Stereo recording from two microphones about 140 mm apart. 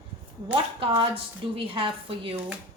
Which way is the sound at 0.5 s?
40° right (ahead or behind).